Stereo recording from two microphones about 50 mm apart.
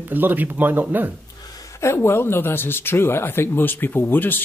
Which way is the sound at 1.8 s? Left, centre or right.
Left.